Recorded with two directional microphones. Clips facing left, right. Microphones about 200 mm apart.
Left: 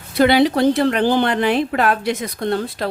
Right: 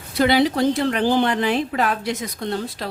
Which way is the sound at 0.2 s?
60° left (ahead or behind).